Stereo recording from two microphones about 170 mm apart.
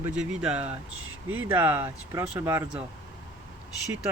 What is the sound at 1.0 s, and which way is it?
Speech, 10° right (ahead or behind).